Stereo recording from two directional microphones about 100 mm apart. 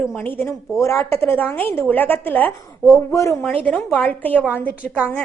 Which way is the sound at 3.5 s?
15° left (ahead or behind).